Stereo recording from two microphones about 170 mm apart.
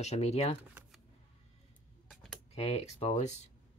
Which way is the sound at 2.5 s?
35° left (ahead or behind).